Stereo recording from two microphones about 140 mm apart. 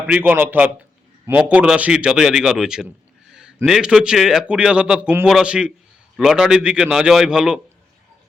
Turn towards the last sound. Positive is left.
turn(degrees=-5)  # may be behind; listen again after turning